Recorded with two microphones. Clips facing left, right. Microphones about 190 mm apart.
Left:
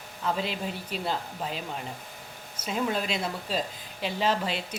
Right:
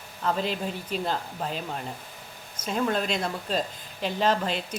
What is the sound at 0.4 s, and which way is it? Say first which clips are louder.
Speech: right 3 dB; 45° right (ahead or behind).